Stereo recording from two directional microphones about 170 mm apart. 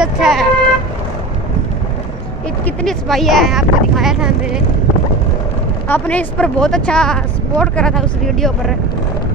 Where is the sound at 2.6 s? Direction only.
5° left (ahead or behind).